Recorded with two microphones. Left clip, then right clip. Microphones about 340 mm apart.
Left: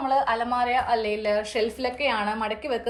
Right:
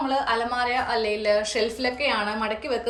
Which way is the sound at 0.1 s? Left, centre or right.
Centre.